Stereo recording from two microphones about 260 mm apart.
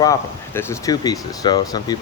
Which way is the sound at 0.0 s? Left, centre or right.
Centre.